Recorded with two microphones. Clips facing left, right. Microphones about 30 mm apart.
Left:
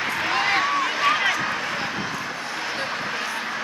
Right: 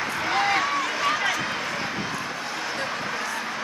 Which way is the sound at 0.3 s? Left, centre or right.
Left.